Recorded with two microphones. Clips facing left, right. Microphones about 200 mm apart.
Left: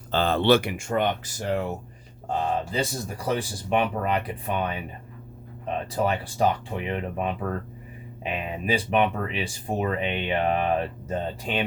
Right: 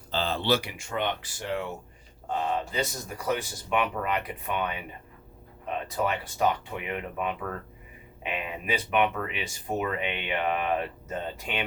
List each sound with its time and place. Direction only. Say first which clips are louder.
0.1 s speech: left 6 dB; 55° left (ahead or behind)
2.7 s speech: left 3 dB; 30° left (ahead or behind)